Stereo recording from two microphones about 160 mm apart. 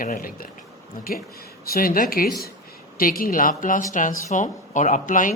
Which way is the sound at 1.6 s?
65° left (ahead or behind).